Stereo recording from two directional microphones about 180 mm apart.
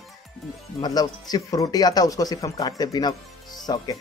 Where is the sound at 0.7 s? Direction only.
20° left (ahead or behind).